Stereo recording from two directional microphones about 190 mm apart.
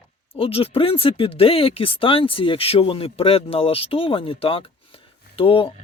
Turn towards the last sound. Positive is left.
turn(degrees=30)  # may be behind; listen again after turning